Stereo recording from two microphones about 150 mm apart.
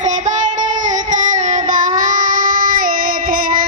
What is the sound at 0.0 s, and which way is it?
Child singing, 55° right (ahead or behind).